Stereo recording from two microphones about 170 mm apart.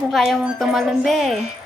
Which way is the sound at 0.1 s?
Centre (ahead or behind).